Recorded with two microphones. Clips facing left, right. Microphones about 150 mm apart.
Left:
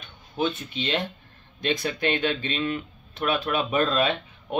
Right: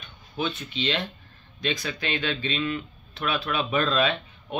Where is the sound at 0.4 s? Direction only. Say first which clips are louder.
Left 2 dB; 50° left (ahead or behind).